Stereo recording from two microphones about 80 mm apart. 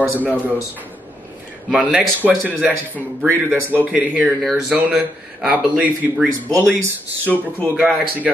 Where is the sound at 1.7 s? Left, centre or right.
Centre.